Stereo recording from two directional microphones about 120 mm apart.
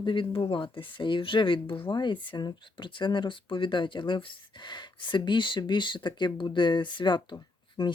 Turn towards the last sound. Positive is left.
turn(degrees=40)  # may be behind; listen again after turning